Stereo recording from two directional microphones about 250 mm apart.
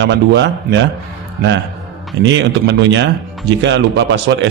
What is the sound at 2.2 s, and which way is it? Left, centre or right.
Speech, right.